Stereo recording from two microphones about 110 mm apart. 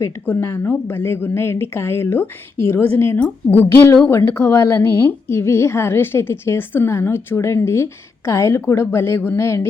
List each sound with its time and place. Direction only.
0.3 s a woman's voice: 20° left (ahead or behind)